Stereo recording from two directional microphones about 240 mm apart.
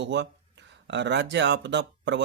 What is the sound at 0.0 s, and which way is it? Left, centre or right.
A man's voice, right.